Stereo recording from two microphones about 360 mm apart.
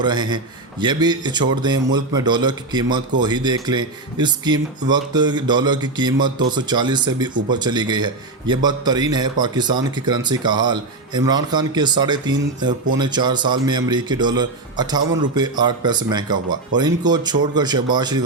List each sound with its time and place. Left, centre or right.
0.0 s speech: centre